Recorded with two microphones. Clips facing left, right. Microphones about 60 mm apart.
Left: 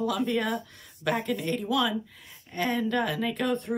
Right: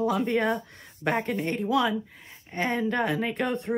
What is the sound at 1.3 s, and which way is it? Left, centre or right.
Speech, right.